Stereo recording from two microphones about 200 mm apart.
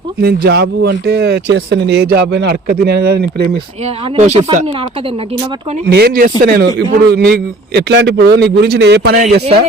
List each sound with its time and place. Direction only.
0.2 s speech: 50° right (ahead or behind)
3.8 s speech: 30° right (ahead or behind)
5.9 s speech: 50° right (ahead or behind)